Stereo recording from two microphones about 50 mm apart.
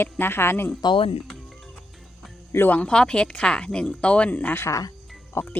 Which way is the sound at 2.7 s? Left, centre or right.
Centre.